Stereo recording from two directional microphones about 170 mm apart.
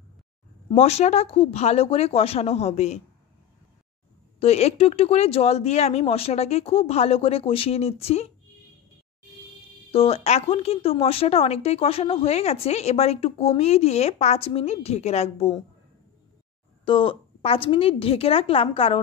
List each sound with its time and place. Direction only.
0.7 s speech: 40° left (ahead or behind)
4.4 s speech: 40° left (ahead or behind)
9.8 s speech: 35° left (ahead or behind)
16.8 s speech: 30° left (ahead or behind)